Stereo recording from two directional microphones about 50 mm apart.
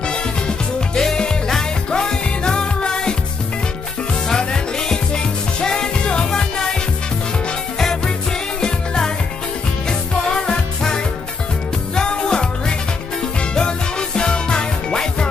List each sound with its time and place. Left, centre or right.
0.1 s music: centre
4.3 s music: centre
8.5 s music: centre